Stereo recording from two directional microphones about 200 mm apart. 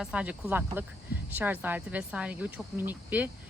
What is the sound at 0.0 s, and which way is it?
Speech, 5° right (ahead or behind).